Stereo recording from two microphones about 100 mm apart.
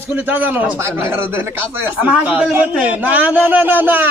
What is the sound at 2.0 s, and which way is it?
A man's voice, 10° right (ahead or behind).